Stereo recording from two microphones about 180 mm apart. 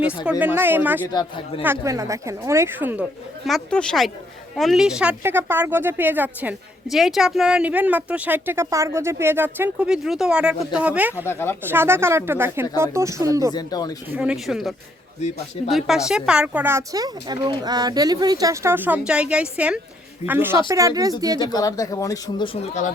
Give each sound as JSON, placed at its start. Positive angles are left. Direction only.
{"t": 0.3, "sound": "speech", "side_deg": -10}
{"t": 1.1, "sound": "speech", "side_deg": 25}
{"t": 1.6, "sound": "speech", "side_deg": -15}
{"t": 11.3, "sound": "speech", "side_deg": 15}
{"t": 11.6, "sound": "speech", "side_deg": -10}
{"t": 13.5, "sound": "speech", "side_deg": 20}
{"t": 14.2, "sound": "speech", "side_deg": -5}
{"t": 15.6, "sound": "speech", "side_deg": 35}
{"t": 16.0, "sound": "speech", "side_deg": -5}
{"t": 21.5, "sound": "speech", "side_deg": 20}